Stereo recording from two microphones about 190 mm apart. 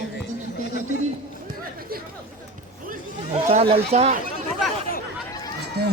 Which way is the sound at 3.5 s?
30° right (ahead or behind).